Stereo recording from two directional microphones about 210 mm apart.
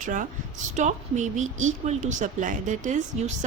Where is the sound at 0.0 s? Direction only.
40° right (ahead or behind).